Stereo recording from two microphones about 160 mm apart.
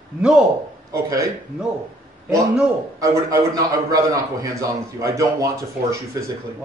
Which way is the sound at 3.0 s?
20° right (ahead or behind).